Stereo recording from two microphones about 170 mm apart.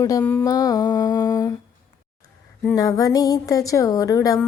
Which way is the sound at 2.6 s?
20° left (ahead or behind).